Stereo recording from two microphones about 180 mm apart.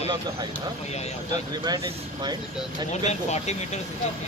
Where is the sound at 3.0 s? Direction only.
40° left (ahead or behind).